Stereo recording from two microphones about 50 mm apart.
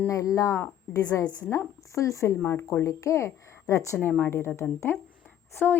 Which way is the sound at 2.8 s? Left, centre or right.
Left.